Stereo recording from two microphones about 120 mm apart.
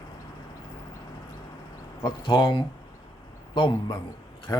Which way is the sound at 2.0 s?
40° left (ahead or behind).